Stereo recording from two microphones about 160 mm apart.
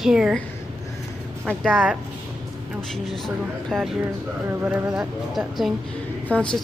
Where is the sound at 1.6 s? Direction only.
Centre (ahead or behind).